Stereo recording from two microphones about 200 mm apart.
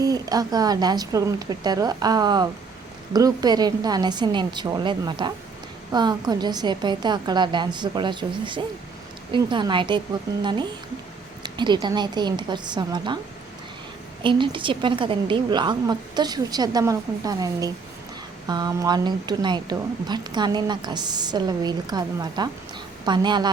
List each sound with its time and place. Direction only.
0.0 s a woman's voice: 20° right (ahead or behind)
11.4 s a woman's voice: 20° right (ahead or behind)
14.2 s a woman's voice: 25° right (ahead or behind)